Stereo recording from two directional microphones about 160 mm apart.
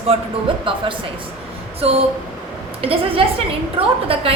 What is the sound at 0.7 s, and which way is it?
Speech, 30° right (ahead or behind).